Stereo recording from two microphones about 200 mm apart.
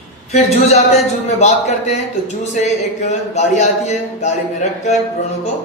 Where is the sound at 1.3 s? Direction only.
35° left (ahead or behind).